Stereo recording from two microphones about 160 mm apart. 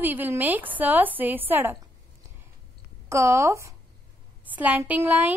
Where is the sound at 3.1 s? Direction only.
15° right (ahead or behind).